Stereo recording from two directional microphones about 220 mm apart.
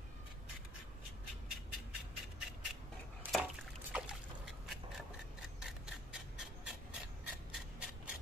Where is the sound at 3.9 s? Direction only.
5° right (ahead or behind).